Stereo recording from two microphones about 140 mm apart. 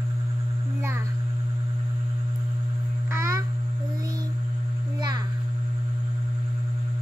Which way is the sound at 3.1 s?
25° right (ahead or behind).